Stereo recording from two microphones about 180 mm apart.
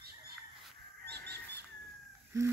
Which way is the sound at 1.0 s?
65° right (ahead or behind).